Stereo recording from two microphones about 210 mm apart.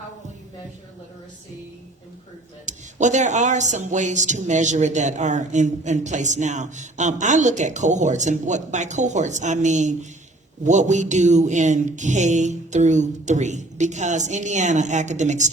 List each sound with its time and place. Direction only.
2.6 s speech: 35° right (ahead or behind)